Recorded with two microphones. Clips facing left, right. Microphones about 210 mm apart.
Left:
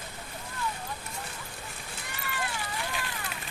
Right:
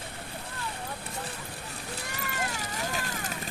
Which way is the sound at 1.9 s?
40° right (ahead or behind).